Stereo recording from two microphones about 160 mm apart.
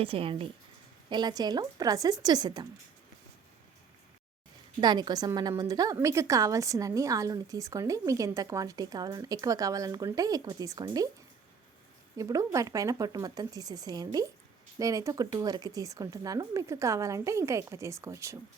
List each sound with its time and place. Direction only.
0.0 s a woman's voice: 35° right (ahead or behind)
4.8 s a woman's voice: 25° right (ahead or behind)
12.1 s a woman's voice: 20° right (ahead or behind)